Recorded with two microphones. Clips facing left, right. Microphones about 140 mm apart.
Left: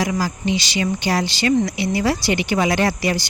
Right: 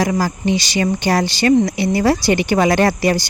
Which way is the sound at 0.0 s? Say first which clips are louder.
Right 4 dB; 50° right (ahead or behind).